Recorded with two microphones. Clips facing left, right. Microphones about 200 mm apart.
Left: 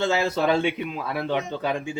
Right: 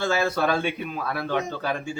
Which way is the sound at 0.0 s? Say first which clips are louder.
Left 1 dB; 20° left (ahead or behind).